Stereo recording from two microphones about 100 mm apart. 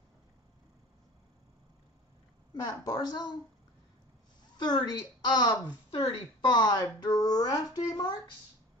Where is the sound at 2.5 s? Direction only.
40° left (ahead or behind).